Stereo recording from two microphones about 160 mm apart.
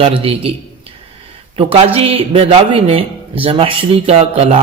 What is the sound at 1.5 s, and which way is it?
A man's voice, 40° right (ahead or behind).